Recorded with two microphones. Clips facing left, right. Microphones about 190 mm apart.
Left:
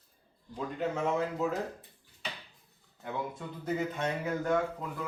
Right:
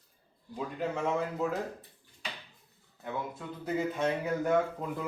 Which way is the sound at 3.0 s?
5° right (ahead or behind).